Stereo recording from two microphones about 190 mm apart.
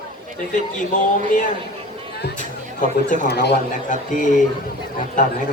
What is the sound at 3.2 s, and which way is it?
Speech, 60° left (ahead or behind).